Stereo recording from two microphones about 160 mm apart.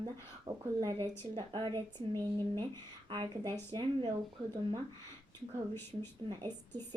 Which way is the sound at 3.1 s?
30° right (ahead or behind).